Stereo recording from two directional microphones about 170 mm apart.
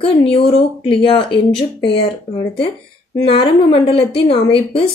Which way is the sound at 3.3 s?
30° left (ahead or behind).